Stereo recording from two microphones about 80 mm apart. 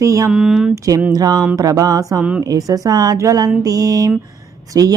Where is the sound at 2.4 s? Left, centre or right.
Right.